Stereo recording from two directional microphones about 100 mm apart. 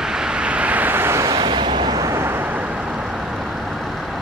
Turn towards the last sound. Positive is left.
turn(degrees=-10)  # may be behind; listen again after turning